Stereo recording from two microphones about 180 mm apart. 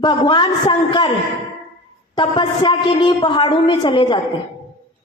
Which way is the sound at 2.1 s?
25° left (ahead or behind).